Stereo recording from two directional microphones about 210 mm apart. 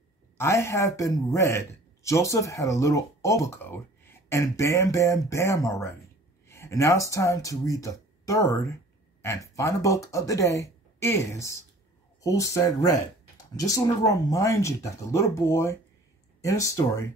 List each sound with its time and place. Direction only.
0.4 s a man's voice: 15° left (ahead or behind)